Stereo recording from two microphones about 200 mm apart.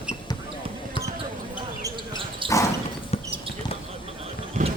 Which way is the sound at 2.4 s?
25° right (ahead or behind).